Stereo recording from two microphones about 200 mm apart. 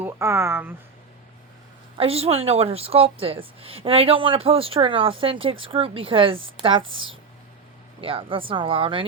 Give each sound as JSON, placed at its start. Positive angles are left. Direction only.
{"t": 0.0, "sound": "speech", "side_deg": -15}
{"t": 2.0, "sound": "a woman's voice", "side_deg": -30}